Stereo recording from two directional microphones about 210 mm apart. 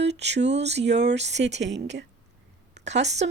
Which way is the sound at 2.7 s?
55° right (ahead or behind).